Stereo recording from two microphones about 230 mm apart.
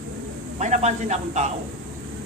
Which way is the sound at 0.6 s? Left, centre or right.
Right.